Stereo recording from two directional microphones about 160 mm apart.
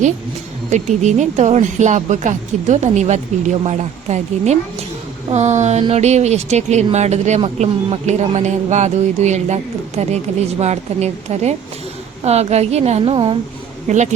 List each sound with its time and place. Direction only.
0.7 s a woman's voice: 45° right (ahead or behind)
13.8 s speech: 45° right (ahead or behind)